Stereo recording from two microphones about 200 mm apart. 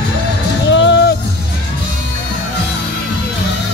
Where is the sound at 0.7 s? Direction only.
65° left (ahead or behind).